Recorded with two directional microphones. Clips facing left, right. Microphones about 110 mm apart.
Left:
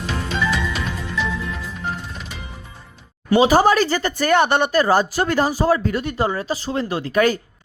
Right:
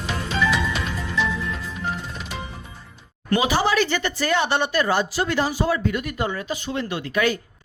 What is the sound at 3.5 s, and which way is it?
Speech, 45° left (ahead or behind).